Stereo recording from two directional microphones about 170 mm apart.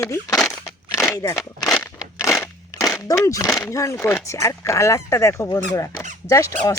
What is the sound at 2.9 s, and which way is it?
Speech, 20° left (ahead or behind).